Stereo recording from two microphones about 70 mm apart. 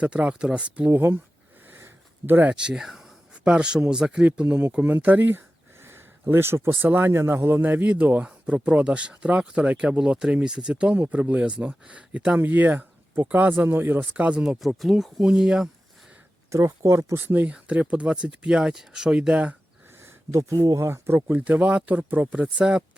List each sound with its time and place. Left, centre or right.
0.0 s speech: centre
0.9 s speech: right
1.6 s a sound: right
2.5 s speech: centre
3.4 s speech: centre
5.8 s a sound: right
6.8 s speech: right
14.0 s speech: centre
14.6 s speech: centre
16.5 s speech: right
17.2 s speech: right
20.7 s speech: right
21.3 s speech: right